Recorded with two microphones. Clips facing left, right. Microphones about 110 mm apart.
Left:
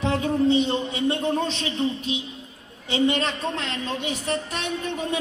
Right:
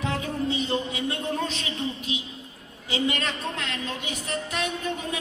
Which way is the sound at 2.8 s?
30° left (ahead or behind).